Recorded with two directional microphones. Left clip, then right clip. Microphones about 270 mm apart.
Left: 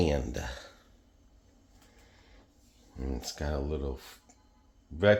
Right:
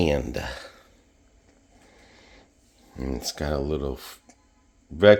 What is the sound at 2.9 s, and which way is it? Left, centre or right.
Speech, right.